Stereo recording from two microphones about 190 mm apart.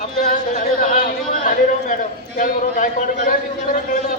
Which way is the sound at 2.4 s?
45° left (ahead or behind).